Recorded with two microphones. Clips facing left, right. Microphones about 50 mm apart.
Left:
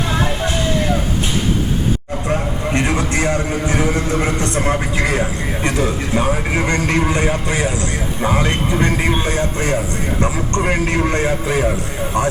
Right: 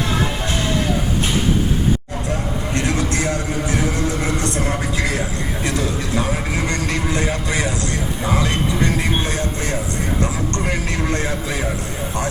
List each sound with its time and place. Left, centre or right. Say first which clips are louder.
0.1 s vehicle: left 2 dB; left
2.3 s a man's voice: left 4 dB; left
8.2 s a man's voice: left 3 dB; left